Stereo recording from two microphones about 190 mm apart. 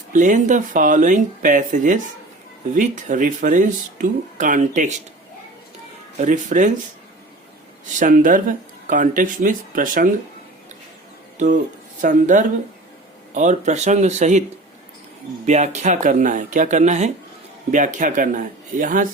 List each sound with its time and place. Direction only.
0.1 s speech: 40° right (ahead or behind)
6.1 s speech: 40° right (ahead or behind)
7.9 s speech: 45° right (ahead or behind)
11.3 s speech: 40° right (ahead or behind)
15.4 s speech: 40° right (ahead or behind)